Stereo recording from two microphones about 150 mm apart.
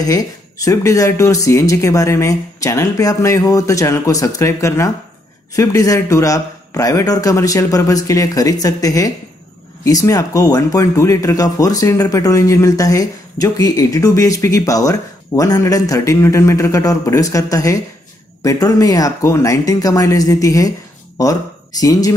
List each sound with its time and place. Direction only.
0.0 s speech: 25° left (ahead or behind)